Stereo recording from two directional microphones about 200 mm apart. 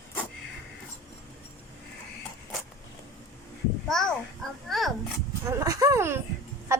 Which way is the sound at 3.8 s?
Centre (ahead or behind).